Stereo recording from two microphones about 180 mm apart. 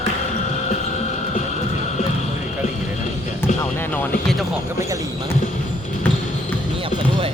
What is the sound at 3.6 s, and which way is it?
Music, 10° left (ahead or behind).